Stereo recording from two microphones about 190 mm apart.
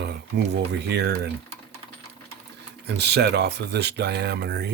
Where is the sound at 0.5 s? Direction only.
60° right (ahead or behind).